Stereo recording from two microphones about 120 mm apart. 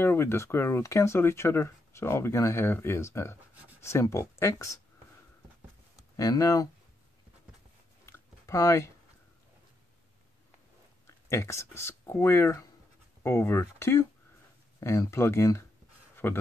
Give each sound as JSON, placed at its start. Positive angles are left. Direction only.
{"t": 0.0, "sound": "speech", "side_deg": 20}
{"t": 6.1, "sound": "speech", "side_deg": 30}
{"t": 8.0, "sound": "a sound", "side_deg": 25}
{"t": 11.1, "sound": "speech", "side_deg": 25}